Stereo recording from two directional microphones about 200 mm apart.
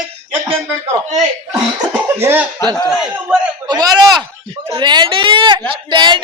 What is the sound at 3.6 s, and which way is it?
Speech, 20° right (ahead or behind).